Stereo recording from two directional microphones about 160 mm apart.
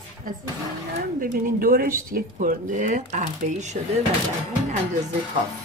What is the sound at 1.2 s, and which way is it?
Speech, 65° right (ahead or behind).